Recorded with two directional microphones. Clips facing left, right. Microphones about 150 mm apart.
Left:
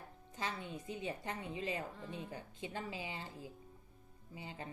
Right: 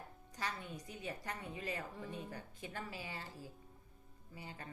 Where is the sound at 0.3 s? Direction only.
20° left (ahead or behind).